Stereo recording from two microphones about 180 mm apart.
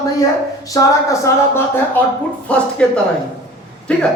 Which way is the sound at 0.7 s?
20° left (ahead or behind).